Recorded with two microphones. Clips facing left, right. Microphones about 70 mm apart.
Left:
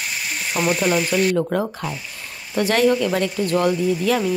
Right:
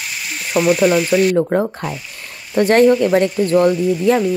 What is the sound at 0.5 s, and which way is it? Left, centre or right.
Speech, centre.